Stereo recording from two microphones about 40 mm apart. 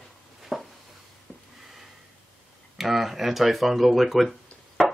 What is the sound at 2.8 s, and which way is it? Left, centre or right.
Speech, centre.